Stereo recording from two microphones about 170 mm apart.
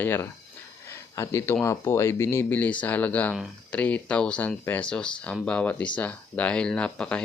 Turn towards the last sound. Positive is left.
turn(degrees=5)  # may be behind; listen again after turning